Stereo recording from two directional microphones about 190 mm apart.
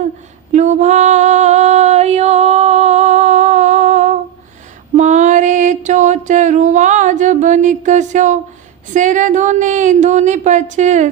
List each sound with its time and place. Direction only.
0.5 s a sound: 40° right (ahead or behind)
4.9 s mantra: 40° right (ahead or behind)
8.9 s speech: 40° right (ahead or behind)